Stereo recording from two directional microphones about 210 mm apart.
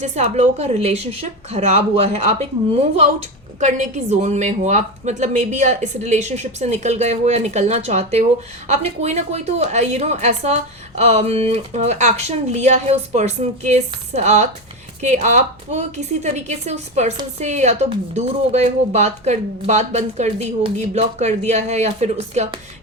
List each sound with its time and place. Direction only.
0.0 s a woman's voice: 35° right (ahead or behind)